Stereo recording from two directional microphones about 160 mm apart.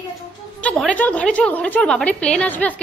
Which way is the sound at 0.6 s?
5° left (ahead or behind).